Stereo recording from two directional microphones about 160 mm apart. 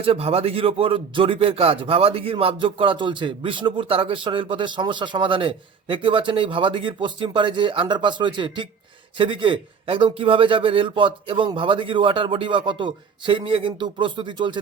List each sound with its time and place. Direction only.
0.0 s a man's voice: 35° right (ahead or behind)